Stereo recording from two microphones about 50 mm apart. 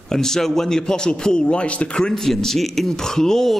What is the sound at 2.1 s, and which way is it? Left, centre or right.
A man's voice, centre.